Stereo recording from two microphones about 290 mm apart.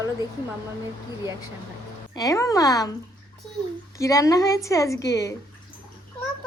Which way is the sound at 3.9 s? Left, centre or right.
Centre.